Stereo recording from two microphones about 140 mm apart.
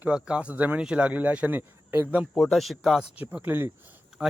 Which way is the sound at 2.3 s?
Centre (ahead or behind).